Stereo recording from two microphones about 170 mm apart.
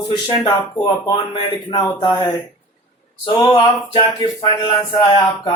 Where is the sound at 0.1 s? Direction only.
25° left (ahead or behind).